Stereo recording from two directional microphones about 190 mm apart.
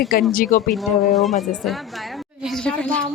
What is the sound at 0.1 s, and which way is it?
Speech, 50° left (ahead or behind).